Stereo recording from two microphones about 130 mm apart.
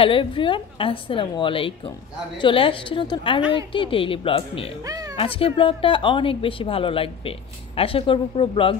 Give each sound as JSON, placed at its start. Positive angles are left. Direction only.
{"t": 0.0, "sound": "a woman's voice", "side_deg": 40}
{"t": 4.8, "sound": "cat", "side_deg": -25}
{"t": 5.1, "sound": "speech", "side_deg": 45}